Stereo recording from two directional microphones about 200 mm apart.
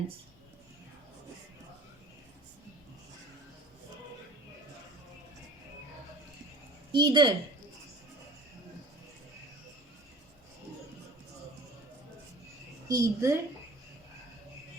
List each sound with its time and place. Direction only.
6.9 s a woman's voice: 20° right (ahead or behind)
12.9 s a woman's voice: 15° right (ahead or behind)